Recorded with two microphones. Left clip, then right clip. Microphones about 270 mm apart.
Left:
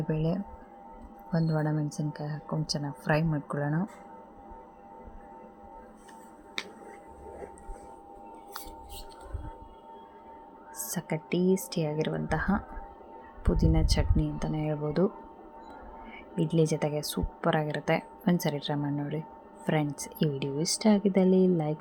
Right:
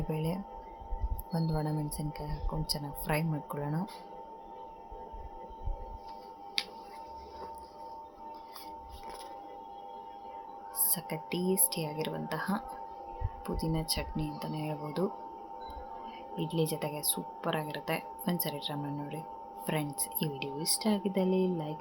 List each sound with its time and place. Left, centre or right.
0.1 s speech: centre
1.5 s speech: centre
10.9 s speech: centre
16.4 s speech: centre